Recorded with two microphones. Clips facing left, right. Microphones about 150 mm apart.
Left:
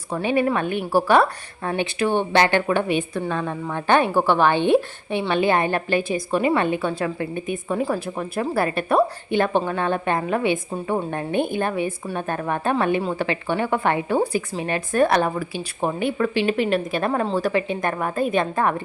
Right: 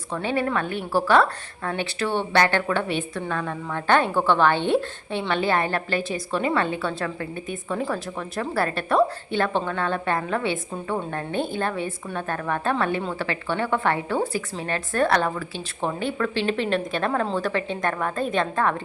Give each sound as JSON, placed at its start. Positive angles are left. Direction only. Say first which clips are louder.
{"t": 0.1, "sound": "a woman's voice", "louder": "left 4 dB", "side_deg": 15}